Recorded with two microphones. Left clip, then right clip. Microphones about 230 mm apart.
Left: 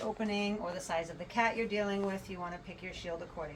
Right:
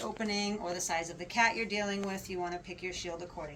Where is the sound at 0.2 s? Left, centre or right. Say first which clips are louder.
Right 1 dB; centre.